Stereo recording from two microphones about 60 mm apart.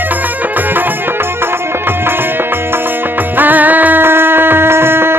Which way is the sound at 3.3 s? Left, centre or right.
Right.